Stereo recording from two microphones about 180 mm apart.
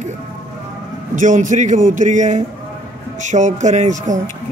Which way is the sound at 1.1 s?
45° right (ahead or behind).